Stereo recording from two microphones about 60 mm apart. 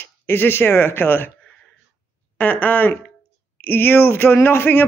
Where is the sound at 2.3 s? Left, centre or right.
Left.